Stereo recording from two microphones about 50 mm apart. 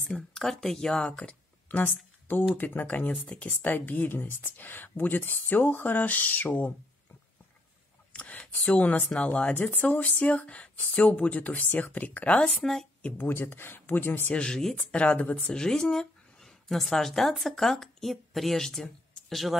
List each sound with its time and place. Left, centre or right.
0.1 s speech: centre
1.7 s speech: left
8.1 s a sound: left
9.1 s speech: left
9.5 s speech: left
13.2 s speech: left
14.3 s speech: centre; by 15.5 s left
15.5 s speech: centre